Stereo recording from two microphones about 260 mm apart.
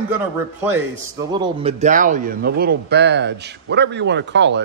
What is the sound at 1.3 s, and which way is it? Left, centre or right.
A man's voice, centre.